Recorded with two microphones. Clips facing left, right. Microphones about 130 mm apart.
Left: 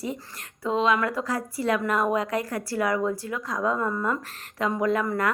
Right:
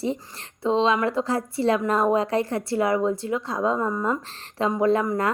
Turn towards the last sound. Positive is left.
turn(degrees=-25)  # may be behind; listen again after turning